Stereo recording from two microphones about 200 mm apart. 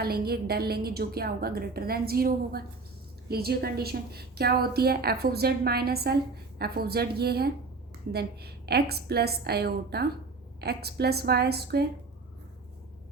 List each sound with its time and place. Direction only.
0.0 s a woman's voice: 50° right (ahead or behind)